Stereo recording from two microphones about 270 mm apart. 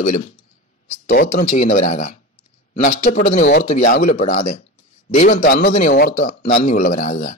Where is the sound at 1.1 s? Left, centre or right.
Left.